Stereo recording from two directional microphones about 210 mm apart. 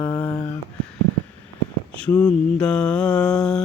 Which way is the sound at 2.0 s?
5° left (ahead or behind).